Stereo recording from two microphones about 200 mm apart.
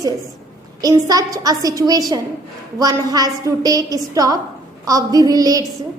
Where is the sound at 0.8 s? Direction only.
20° right (ahead or behind).